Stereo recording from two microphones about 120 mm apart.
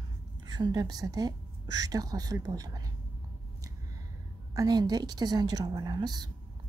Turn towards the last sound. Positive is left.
turn(degrees=-35)  # may be behind; listen again after turning